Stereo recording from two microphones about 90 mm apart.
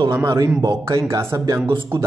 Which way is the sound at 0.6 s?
35° right (ahead or behind).